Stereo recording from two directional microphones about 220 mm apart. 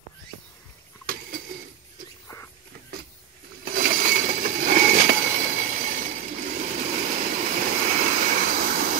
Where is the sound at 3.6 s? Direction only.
40° right (ahead or behind).